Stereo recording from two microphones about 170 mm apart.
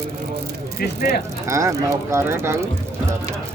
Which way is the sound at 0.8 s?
65° left (ahead or behind).